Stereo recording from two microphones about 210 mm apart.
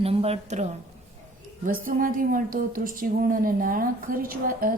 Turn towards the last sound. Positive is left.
turn(degrees=-40)  # may be behind; listen again after turning